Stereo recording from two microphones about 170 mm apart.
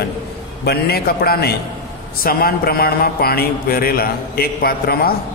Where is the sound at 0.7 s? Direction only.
65° left (ahead or behind).